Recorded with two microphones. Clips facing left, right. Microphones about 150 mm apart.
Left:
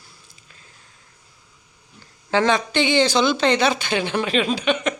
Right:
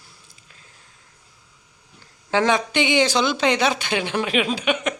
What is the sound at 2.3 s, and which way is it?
Speech, 15° right (ahead or behind).